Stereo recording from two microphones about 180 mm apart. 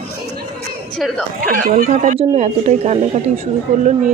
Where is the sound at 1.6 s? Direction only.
45° right (ahead or behind).